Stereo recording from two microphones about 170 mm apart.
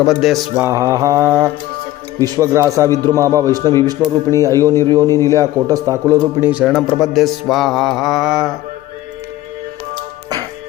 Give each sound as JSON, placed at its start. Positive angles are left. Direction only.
{"t": 0.0, "sound": "music", "side_deg": 0}
{"t": 0.5, "sound": "mantra", "side_deg": -15}
{"t": 2.2, "sound": "a man's voice", "side_deg": -20}
{"t": 6.5, "sound": "music", "side_deg": -5}